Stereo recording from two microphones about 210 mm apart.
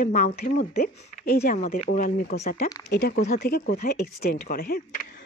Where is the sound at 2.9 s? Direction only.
55° left (ahead or behind).